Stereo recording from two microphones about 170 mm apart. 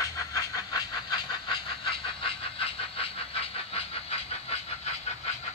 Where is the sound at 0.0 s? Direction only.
20° left (ahead or behind).